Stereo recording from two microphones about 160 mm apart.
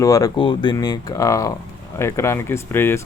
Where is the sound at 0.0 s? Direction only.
20° left (ahead or behind).